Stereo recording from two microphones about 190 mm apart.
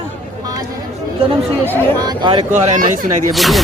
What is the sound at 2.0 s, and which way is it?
Speech, 25° right (ahead or behind).